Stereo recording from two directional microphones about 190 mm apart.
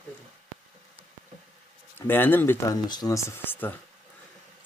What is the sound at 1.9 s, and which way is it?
Speech, 10° left (ahead or behind).